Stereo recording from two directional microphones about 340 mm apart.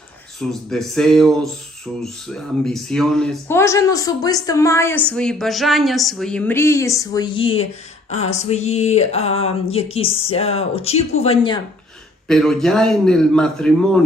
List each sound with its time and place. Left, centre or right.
0.3 s speech: centre
8.1 s a sound: centre
12.3 s speech: centre